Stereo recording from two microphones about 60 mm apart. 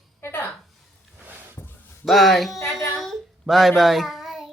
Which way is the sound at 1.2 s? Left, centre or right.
Right.